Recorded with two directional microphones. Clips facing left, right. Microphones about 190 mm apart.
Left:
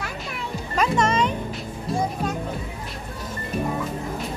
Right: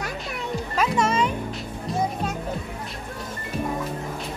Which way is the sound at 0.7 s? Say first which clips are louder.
Left 2 dB; 5° right (ahead or behind).